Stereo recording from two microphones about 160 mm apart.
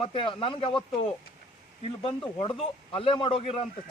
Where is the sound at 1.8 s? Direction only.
35° left (ahead or behind).